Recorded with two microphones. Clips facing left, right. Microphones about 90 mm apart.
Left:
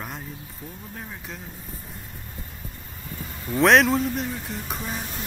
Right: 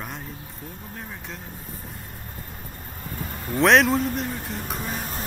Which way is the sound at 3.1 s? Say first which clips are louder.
Right 2 dB; 50° right (ahead or behind).